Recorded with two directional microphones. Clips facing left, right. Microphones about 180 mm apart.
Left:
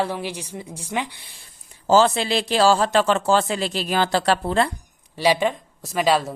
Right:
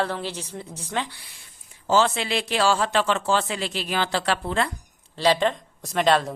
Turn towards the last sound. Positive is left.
turn(degrees=5)  # may be behind; listen again after turning